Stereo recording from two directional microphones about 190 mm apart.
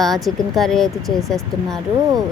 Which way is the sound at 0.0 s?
Centre (ahead or behind).